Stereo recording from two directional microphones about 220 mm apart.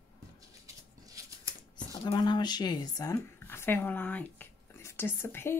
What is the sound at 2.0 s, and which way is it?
Speech, 20° left (ahead or behind).